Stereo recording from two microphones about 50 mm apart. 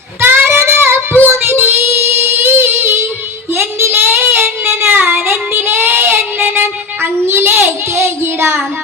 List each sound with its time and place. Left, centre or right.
0.2 s child singing: right